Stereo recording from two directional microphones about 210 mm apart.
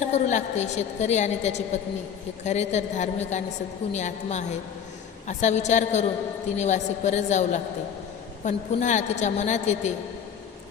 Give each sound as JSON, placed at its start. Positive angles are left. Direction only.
{"t": 0.0, "sound": "a woman's voice", "side_deg": 35}